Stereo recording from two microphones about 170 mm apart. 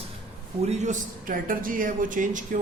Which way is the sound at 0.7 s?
45° right (ahead or behind).